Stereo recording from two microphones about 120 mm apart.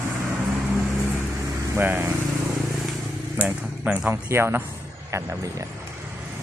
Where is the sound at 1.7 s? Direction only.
15° right (ahead or behind).